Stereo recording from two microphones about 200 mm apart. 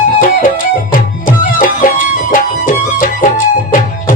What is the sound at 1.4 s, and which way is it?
Music, 40° left (ahead or behind).